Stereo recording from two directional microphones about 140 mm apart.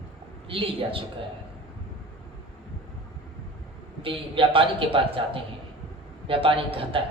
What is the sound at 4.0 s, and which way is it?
A man's voice, 40° right (ahead or behind).